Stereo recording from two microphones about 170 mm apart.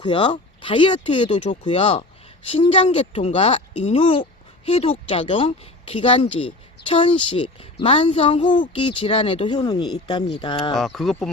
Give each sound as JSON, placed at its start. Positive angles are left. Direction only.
{"t": 0.0, "sound": "a woman's voice", "side_deg": 30}
{"t": 10.8, "sound": "speech", "side_deg": 0}